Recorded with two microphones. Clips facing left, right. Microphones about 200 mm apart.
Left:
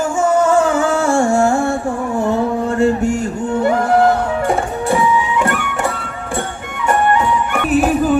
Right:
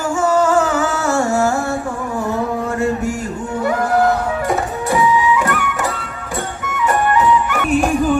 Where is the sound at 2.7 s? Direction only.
30° left (ahead or behind).